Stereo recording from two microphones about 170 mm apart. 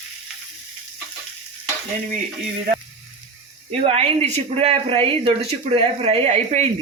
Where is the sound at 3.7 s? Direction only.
35° right (ahead or behind).